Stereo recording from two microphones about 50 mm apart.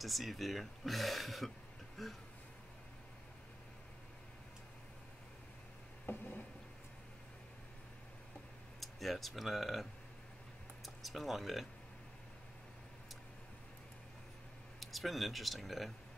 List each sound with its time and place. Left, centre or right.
0.0 s speech: centre
6.0 s a sound: left
8.7 s speech: centre
11.0 s speech: centre
14.8 s speech: centre